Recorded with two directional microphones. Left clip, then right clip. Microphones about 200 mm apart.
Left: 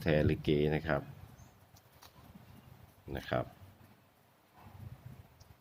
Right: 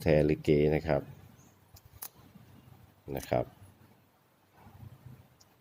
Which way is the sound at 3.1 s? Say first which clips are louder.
Right 5 dB; 20° right (ahead or behind).